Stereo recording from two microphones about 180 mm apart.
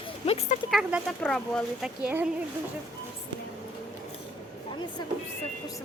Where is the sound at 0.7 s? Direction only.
5° right (ahead or behind).